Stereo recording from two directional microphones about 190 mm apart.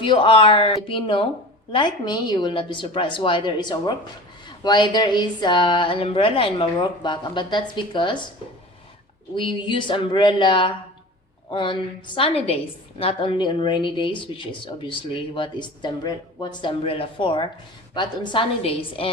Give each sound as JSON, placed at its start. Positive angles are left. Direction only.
{"t": 0.0, "sound": "speech", "side_deg": 25}
{"t": 9.3, "sound": "speech", "side_deg": 25}